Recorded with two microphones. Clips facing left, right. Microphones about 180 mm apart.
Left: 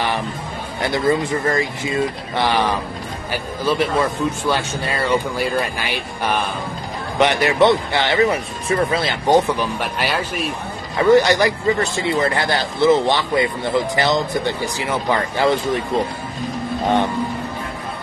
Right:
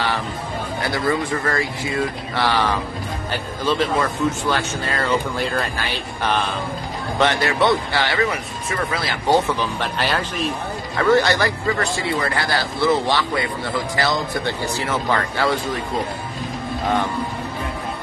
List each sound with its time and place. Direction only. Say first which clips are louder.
0.9 s speech: left 4 dB; 20° left (ahead or behind)